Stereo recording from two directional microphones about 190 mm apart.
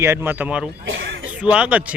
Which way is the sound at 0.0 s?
15° right (ahead or behind).